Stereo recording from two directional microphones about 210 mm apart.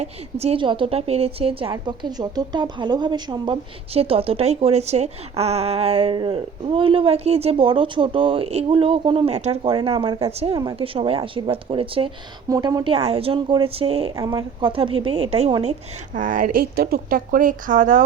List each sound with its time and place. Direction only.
0.0 s a woman's voice: 30° right (ahead or behind)
16.1 s speech: 40° right (ahead or behind)